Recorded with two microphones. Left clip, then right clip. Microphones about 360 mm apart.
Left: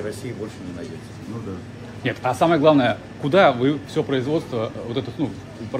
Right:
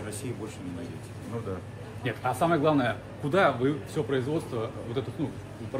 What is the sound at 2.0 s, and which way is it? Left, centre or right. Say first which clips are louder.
A man's voice: left 8 dB; left.